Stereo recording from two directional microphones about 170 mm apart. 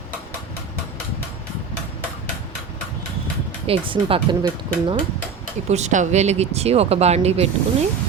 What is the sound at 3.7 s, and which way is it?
Speech, 30° right (ahead or behind).